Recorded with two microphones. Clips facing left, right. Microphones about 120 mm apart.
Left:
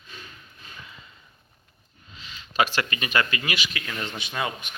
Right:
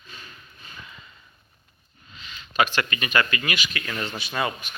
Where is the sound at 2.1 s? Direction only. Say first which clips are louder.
Right 1 dB; 30° left (ahead or behind).